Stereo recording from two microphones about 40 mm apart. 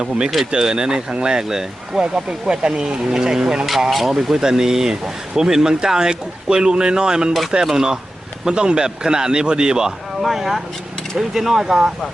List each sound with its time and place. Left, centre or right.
0.5 s speech: centre
3.7 s speech: centre
10.2 s speech: centre